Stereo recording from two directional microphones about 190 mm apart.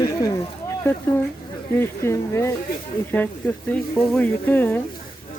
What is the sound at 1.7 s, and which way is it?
Speech, 15° left (ahead or behind).